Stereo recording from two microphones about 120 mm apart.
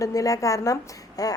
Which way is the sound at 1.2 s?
30° left (ahead or behind).